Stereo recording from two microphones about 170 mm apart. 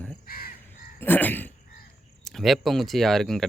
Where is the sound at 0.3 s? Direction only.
60° left (ahead or behind).